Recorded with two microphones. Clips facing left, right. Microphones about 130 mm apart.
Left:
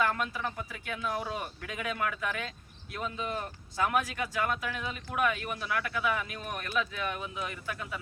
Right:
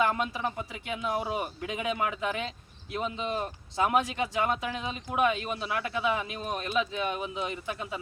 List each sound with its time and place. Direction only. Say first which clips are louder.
0.0 s speech: right 3 dB; 20° right (ahead or behind)